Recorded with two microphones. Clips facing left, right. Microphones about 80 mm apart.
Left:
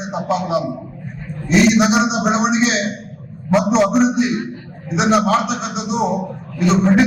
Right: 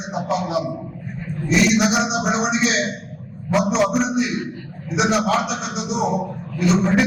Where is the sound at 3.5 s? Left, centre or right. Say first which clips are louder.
Left 4 dB; left.